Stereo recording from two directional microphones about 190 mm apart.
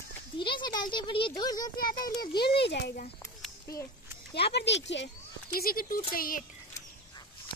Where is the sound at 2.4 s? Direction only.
60° left (ahead or behind).